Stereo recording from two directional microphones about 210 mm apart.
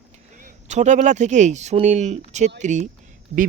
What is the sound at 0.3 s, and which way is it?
Speech, 35° right (ahead or behind).